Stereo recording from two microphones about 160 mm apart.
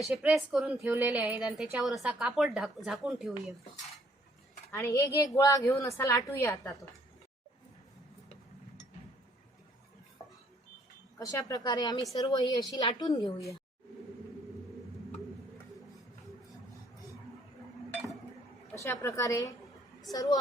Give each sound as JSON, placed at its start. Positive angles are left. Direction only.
{"t": 0.2, "sound": "a woman's voice", "side_deg": -5}
{"t": 4.7, "sound": "a woman's voice", "side_deg": 15}
{"t": 10.2, "sound": "a sound", "side_deg": 25}
{"t": 11.2, "sound": "a woman's voice", "side_deg": 20}
{"t": 18.8, "sound": "a woman's voice", "side_deg": 20}